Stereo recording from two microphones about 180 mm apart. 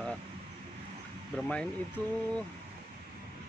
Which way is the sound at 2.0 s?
20° right (ahead or behind).